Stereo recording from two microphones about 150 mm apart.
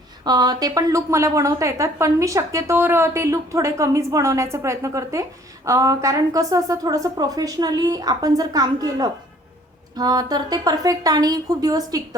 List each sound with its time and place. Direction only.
0.3 s a woman's voice: 25° right (ahead or behind)